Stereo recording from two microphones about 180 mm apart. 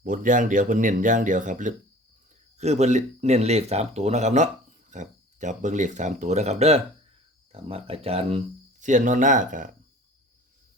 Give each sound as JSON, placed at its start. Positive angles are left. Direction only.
{"t": 0.0, "sound": "speech", "side_deg": -45}
{"t": 8.8, "sound": "speech", "side_deg": -45}